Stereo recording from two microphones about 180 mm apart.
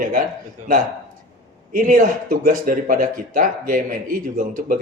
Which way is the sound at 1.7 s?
50° right (ahead or behind).